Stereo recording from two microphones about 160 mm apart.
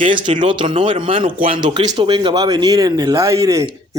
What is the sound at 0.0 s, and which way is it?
A man's voice, 30° right (ahead or behind).